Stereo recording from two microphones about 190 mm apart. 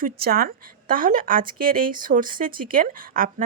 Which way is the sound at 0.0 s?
50° right (ahead or behind).